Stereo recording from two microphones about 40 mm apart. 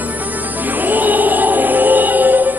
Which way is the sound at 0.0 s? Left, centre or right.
Right.